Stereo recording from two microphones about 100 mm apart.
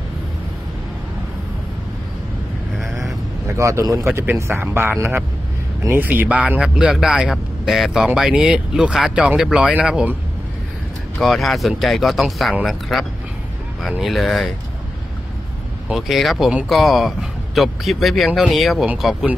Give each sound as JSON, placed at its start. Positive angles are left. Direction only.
{"t": 2.8, "sound": "vehicle", "side_deg": 0}
{"t": 3.5, "sound": "a man's voice", "side_deg": -30}
{"t": 11.1, "sound": "speech", "side_deg": 0}
{"t": 15.9, "sound": "speech", "side_deg": 0}